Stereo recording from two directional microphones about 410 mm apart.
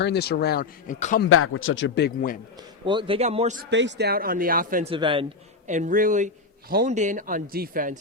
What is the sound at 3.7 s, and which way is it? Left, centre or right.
A man's voice, right.